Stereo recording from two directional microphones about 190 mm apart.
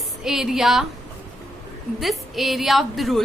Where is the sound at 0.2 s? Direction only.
Centre (ahead or behind).